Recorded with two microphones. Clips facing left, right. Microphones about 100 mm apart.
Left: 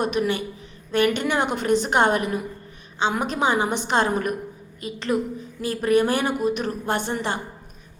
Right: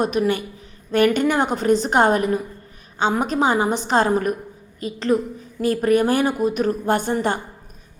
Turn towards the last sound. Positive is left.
turn(degrees=-45)  # may be behind; listen again after turning